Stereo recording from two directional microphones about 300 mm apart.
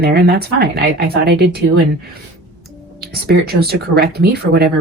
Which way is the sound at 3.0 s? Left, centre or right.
Right.